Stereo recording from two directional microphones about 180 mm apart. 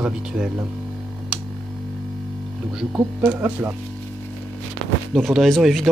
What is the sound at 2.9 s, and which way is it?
Speech, 10° right (ahead or behind).